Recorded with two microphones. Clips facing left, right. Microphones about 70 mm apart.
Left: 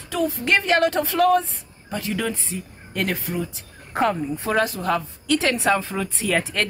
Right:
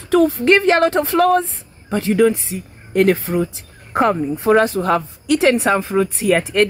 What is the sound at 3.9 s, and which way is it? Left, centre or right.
Speech, right.